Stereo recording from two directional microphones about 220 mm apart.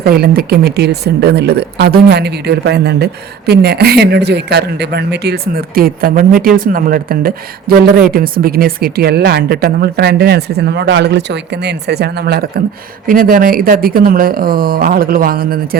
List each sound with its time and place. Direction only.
0.0 s speech: 45° right (ahead or behind)